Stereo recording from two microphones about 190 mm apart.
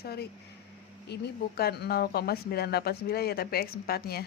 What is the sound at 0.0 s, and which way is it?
Speech, 55° left (ahead or behind).